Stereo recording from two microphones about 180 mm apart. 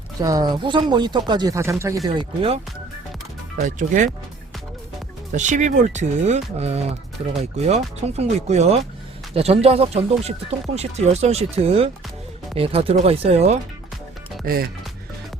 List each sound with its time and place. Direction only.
0.2 s speech: 20° right (ahead or behind)
2.0 s speech: 30° right (ahead or behind)
3.6 s speech: 45° right (ahead or behind)
5.3 s speech: 40° right (ahead or behind)
14.4 s speech: 55° right (ahead or behind)